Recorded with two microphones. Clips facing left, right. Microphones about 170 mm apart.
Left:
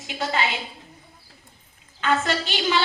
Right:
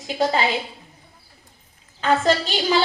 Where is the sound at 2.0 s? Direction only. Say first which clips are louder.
Right 4 dB; 35° right (ahead or behind).